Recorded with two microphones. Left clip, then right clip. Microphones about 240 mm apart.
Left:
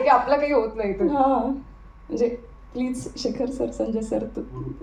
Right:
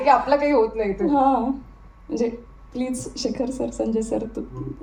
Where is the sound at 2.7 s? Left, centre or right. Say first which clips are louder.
Right 1 dB; right.